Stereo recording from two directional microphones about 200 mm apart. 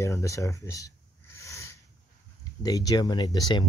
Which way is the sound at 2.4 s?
20° left (ahead or behind).